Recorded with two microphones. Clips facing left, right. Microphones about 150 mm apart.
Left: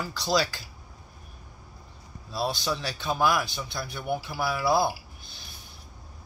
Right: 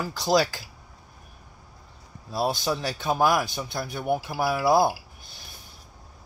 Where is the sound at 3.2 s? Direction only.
45° right (ahead or behind).